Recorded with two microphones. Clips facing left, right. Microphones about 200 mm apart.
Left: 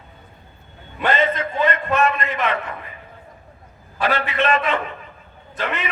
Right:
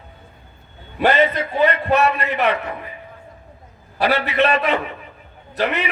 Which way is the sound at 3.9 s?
35° right (ahead or behind).